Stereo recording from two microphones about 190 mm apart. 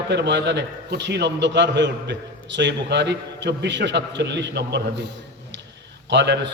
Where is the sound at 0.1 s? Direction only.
65° right (ahead or behind).